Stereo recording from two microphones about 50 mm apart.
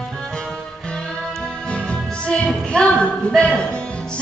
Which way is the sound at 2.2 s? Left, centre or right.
Left.